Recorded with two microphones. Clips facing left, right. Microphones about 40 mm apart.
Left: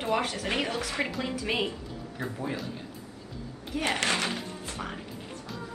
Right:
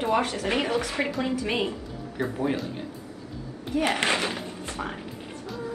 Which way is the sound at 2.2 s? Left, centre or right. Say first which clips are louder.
Right 7 dB; right.